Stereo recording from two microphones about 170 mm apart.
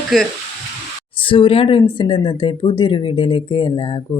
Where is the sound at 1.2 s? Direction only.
30° left (ahead or behind).